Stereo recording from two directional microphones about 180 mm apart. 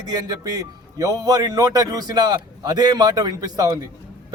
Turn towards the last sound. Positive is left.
turn(degrees=-20)  # may be behind; listen again after turning